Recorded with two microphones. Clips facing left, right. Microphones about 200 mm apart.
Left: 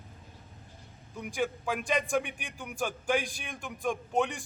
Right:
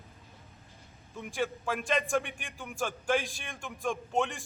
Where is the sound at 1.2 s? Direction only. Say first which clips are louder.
Left 1 dB; centre (ahead or behind).